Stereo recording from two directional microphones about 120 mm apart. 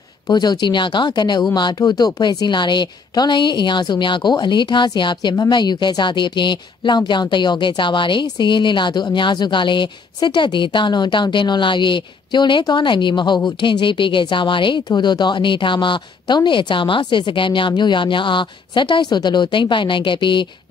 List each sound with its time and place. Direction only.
0.3 s speech: 35° left (ahead or behind)